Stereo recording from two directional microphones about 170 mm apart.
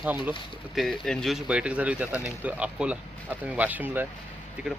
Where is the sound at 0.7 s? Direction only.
Centre (ahead or behind).